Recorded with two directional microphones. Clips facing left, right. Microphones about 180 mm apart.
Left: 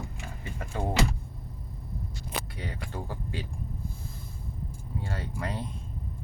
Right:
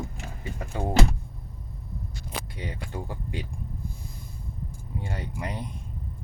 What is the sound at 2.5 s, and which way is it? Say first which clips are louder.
Speech: right 2 dB; 20° right (ahead or behind).